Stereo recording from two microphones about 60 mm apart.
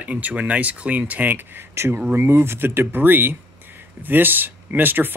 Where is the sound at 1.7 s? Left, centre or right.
Right.